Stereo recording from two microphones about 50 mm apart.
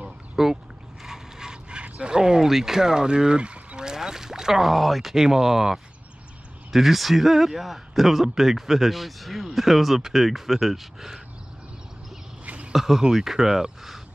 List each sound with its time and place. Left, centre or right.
0.0 s duck: centre
1.0 s speech: centre
12.4 s a sound: right
12.7 s speech: centre